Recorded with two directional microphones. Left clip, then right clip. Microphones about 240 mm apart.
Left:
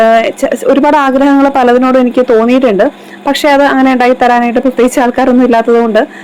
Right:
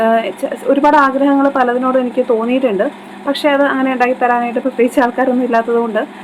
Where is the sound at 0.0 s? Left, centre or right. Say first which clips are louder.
Left 7 dB; left.